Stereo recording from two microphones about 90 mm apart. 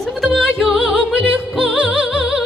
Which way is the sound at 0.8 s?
10° right (ahead or behind).